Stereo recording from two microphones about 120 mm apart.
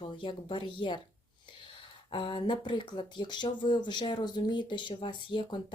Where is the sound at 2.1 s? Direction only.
45° left (ahead or behind).